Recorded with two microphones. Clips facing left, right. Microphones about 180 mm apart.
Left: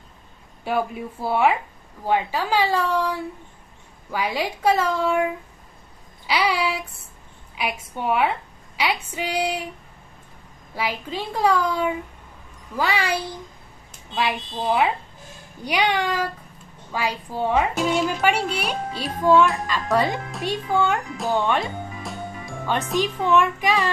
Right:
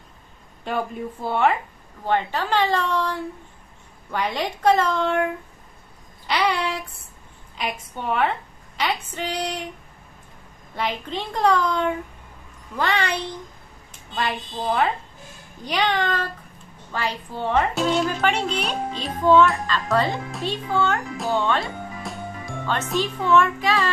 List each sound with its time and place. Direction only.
0.7 s speech: 5° left (ahead or behind)
6.2 s child singing: 5° left (ahead or behind)
7.5 s speech: 10° left (ahead or behind)
10.7 s speech: 5° left (ahead or behind)
22.0 s music: centre (ahead or behind)
22.9 s speech: 15° left (ahead or behind)